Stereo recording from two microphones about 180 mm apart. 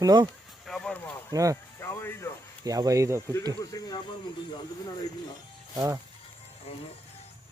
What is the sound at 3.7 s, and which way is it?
Speech, 20° left (ahead or behind).